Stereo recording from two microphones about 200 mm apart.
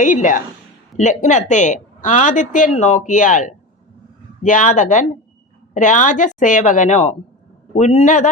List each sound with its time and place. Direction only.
0.0 s a woman's voice: 40° left (ahead or behind)